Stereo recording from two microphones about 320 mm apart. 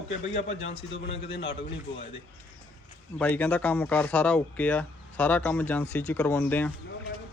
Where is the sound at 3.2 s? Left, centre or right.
Centre.